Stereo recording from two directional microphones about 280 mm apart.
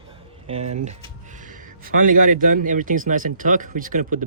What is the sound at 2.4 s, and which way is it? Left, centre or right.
Speech, right.